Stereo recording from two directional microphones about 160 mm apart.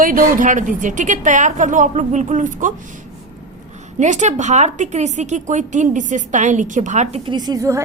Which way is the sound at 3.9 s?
50° right (ahead or behind).